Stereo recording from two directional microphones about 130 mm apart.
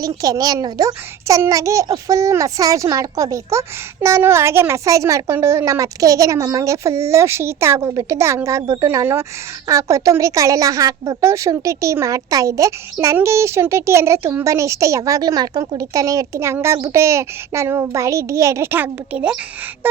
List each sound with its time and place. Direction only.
0.2 s a woman's voice: 30° right (ahead or behind); by 19.4 s 10° right (ahead or behind)
19.8 s gasp: 15° right (ahead or behind)